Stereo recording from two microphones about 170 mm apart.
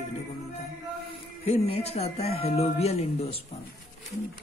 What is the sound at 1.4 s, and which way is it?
Speech, 35° left (ahead or behind).